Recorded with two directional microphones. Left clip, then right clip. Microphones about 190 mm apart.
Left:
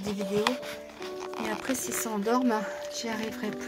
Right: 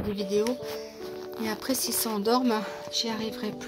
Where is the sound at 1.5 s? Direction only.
15° right (ahead or behind).